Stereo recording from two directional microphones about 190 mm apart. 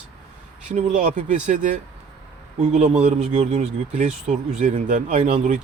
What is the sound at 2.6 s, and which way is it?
Speech, 35° right (ahead or behind).